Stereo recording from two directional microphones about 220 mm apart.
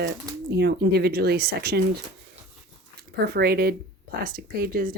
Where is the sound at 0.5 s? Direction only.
50° right (ahead or behind).